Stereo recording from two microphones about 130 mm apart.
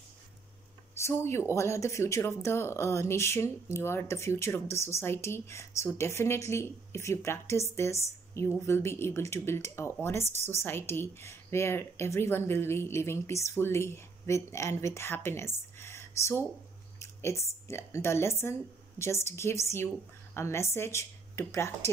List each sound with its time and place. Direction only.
0.9 s speech: 20° left (ahead or behind)